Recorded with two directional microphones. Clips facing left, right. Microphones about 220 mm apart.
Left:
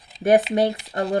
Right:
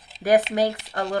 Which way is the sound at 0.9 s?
25° left (ahead or behind).